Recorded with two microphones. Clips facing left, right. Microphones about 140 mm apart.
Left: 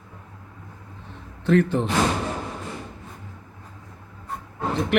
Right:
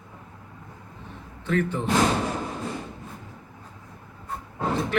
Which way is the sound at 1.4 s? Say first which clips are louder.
Left 6 dB; 75° left (ahead or behind).